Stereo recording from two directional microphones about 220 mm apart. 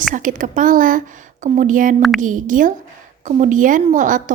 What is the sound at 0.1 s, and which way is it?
A woman's voice, 35° right (ahead or behind).